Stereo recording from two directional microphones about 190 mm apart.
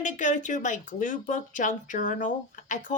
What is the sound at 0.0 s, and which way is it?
Speech, 40° left (ahead or behind).